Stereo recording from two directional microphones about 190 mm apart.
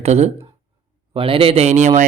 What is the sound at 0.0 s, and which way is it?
Speech, 35° right (ahead or behind).